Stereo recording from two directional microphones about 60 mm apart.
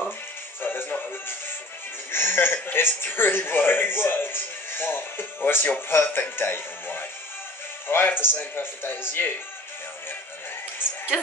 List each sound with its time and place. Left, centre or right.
0.6 s music: left
2.1 s speech: left